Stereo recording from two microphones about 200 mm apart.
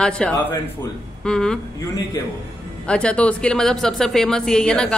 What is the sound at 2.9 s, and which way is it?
A man's voice, 5° left (ahead or behind).